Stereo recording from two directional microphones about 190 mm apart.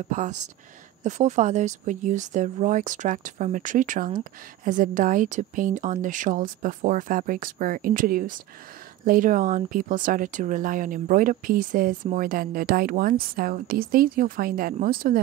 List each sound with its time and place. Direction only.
0.1 s speech: 40° right (ahead or behind)